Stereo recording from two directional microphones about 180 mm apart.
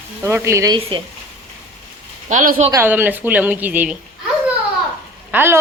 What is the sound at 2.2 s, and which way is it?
Speech, 45° right (ahead or behind).